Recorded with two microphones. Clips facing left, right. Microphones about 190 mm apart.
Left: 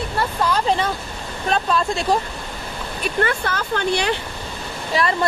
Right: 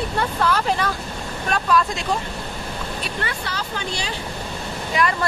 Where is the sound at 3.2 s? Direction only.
50° left (ahead or behind).